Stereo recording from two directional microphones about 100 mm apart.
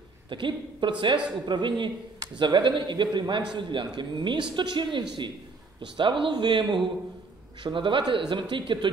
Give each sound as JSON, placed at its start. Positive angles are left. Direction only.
{"t": 0.3, "sound": "speech", "side_deg": -55}